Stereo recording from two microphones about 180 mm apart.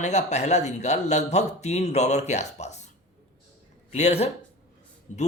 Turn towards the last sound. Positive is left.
turn(degrees=40)  # may be behind; listen again after turning